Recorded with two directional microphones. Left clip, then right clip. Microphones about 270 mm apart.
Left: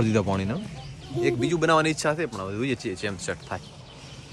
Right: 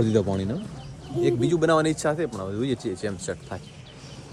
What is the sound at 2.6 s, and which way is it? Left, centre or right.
Speech, centre.